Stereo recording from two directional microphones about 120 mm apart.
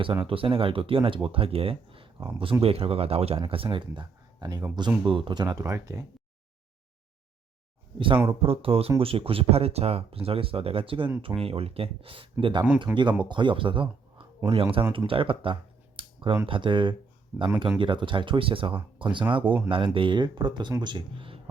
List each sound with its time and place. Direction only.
0.3 s speech: 50° right (ahead or behind); by 6.1 s 30° right (ahead or behind)
7.9 s speech: 45° right (ahead or behind)
12.9 s speech: 15° right (ahead or behind)
13.2 s speech: 40° right (ahead or behind)
16.0 s a sound: 45° right (ahead or behind)
16.5 s speech: 45° right (ahead or behind)
17.3 s speech: 20° right (ahead or behind)
17.7 s speech: 45° right (ahead or behind)